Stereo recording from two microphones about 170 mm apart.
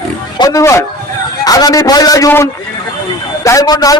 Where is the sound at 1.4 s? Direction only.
20° left (ahead or behind).